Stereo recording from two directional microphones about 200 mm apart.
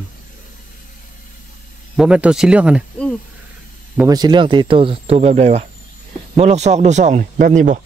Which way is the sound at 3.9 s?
20° right (ahead or behind).